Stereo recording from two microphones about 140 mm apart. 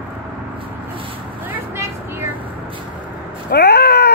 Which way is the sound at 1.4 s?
15° right (ahead or behind).